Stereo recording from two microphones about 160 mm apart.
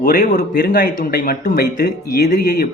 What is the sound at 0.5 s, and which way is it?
Speech, 90° left.